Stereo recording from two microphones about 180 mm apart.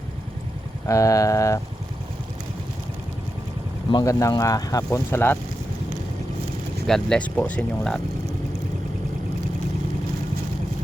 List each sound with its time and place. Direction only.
0.9 s speech: 20° left (ahead or behind)
3.9 s speech: 15° left (ahead or behind)
6.8 s speech: 5° left (ahead or behind)